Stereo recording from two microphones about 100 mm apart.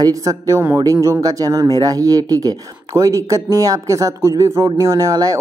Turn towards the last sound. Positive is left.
turn(degrees=-35)  # may be behind; listen again after turning